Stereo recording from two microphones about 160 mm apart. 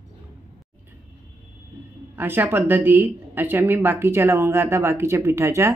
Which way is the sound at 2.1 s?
10° right (ahead or behind).